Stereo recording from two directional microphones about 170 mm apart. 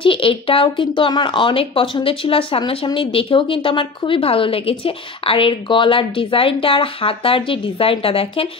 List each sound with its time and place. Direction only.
0.0 s speech: 30° left (ahead or behind)